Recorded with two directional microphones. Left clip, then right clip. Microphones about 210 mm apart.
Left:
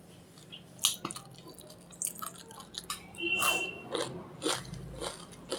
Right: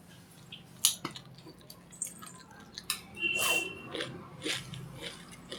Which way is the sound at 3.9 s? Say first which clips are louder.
Left 3 dB; 10° left (ahead or behind).